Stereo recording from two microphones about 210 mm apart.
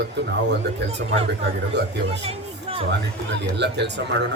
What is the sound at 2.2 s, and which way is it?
Music, 30° right (ahead or behind).